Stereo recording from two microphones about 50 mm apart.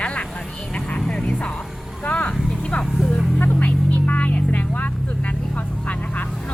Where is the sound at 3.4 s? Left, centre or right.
Left.